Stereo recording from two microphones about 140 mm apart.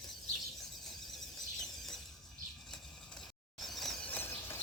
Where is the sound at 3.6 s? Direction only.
Centre (ahead or behind).